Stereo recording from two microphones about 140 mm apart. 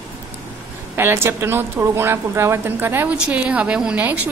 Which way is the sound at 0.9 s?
15° right (ahead or behind).